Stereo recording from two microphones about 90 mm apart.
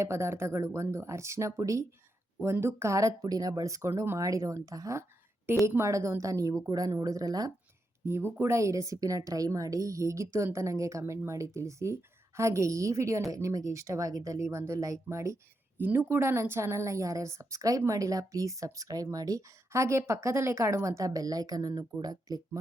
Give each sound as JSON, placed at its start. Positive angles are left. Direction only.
{"t": 0.0, "sound": "speech", "side_deg": -30}
{"t": 8.0, "sound": "speech", "side_deg": -25}
{"t": 15.8, "sound": "speech", "side_deg": -25}